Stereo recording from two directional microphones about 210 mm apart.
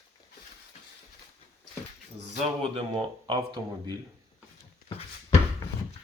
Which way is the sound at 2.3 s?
30° right (ahead or behind).